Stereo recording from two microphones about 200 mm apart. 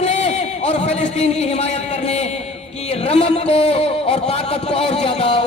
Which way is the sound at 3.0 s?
30° left (ahead or behind).